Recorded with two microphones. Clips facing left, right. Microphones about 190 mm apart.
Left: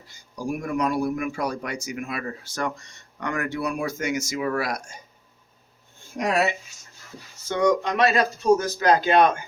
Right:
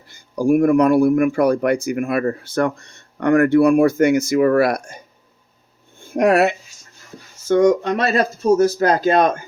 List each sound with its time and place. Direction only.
0.1 s speech: 60° right (ahead or behind)
6.1 s speech: 60° right (ahead or behind)
7.4 s speech: 45° right (ahead or behind)